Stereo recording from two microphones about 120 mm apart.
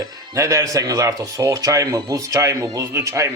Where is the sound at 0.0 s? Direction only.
25° right (ahead or behind).